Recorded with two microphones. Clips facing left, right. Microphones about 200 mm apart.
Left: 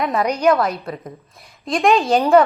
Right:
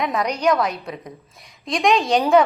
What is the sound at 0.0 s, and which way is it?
A woman's voice, centre (ahead or behind).